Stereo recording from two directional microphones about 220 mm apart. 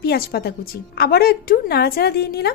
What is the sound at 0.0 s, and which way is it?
A woman's voice, 45° left (ahead or behind).